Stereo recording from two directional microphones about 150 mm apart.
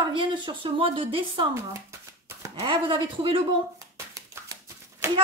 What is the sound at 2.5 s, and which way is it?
Speech, 35° right (ahead or behind).